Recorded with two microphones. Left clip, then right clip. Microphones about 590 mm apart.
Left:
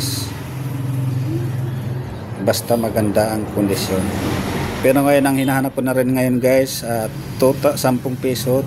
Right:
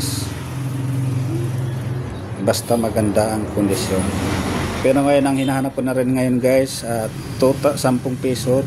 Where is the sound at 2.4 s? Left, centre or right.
Left.